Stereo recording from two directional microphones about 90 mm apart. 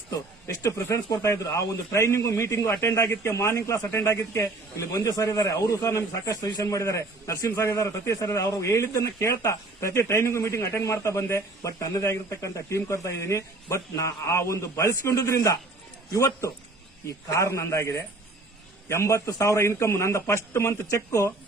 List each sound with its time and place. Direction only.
0.4 s a man's voice: 35° left (ahead or behind)